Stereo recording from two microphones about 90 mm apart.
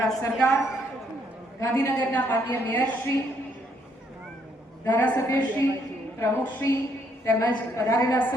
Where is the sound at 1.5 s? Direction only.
35° left (ahead or behind).